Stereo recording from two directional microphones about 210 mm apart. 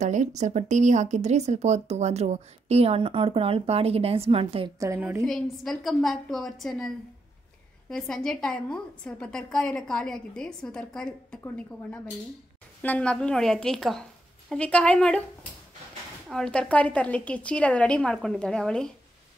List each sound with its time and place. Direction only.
0.0 s speech: 35° right (ahead or behind)
4.7 s a woman's voice: 10° right (ahead or behind)
5.2 s a woman's voice: centre (ahead or behind)
7.9 s a woman's voice: 5° left (ahead or behind)
16.3 s a woman's voice: 5° left (ahead or behind)